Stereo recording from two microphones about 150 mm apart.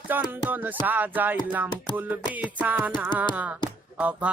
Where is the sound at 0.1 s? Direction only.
10° right (ahead or behind).